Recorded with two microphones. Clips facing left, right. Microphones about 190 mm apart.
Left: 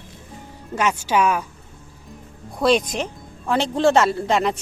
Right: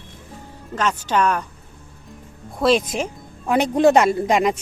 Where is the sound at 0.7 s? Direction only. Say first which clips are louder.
Left 1 dB; 10° left (ahead or behind).